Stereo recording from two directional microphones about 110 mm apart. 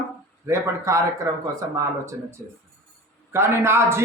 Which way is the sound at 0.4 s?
25° right (ahead or behind).